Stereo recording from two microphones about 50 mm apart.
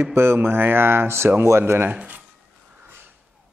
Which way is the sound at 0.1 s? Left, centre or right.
Right.